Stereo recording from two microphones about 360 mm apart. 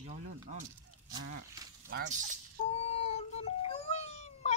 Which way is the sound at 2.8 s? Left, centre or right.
Centre.